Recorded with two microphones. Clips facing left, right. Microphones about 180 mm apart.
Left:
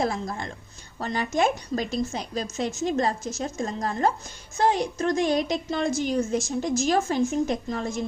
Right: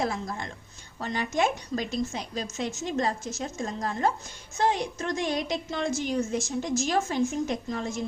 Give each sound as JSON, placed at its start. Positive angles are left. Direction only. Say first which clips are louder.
{"t": 0.9, "sound": "a woman's voice", "louder": "left 3 dB", "side_deg": 40}